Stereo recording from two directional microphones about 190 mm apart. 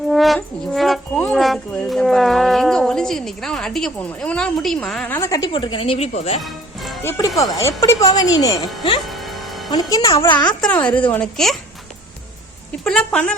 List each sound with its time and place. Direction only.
0.1 s speech: centre (ahead or behind); by 5.5 s 15° left (ahead or behind)
5.5 s speech: 25° left (ahead or behind)
7.0 s speech: 15° left (ahead or behind)
9.0 s music: centre (ahead or behind)
9.6 s speech: 20° left (ahead or behind)
10.8 s speech: 10° left (ahead or behind)
12.8 s speech: centre (ahead or behind)